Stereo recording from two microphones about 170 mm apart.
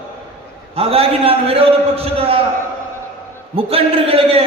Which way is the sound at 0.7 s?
35° right (ahead or behind).